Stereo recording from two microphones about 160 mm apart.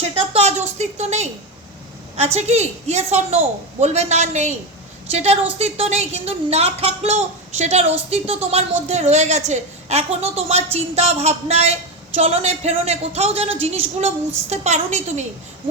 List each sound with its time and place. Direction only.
0.3 s a woman's voice: 45° right (ahead or behind)